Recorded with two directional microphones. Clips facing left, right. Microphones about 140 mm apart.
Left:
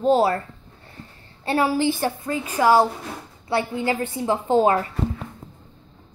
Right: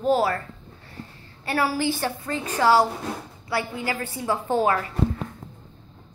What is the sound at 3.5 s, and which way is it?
Speech, 25° left (ahead or behind).